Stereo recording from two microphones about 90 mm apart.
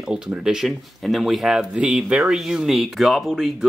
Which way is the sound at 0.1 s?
5° right (ahead or behind).